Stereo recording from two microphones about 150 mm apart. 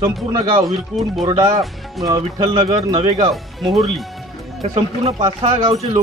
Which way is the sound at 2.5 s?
35° right (ahead or behind).